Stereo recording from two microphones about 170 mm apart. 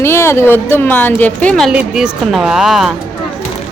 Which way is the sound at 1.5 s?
5° right (ahead or behind).